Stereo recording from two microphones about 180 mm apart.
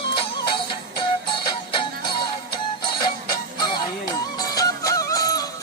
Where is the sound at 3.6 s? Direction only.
25° left (ahead or behind).